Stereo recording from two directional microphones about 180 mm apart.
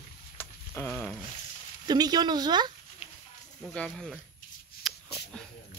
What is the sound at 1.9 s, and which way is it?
Speech, 20° right (ahead or behind).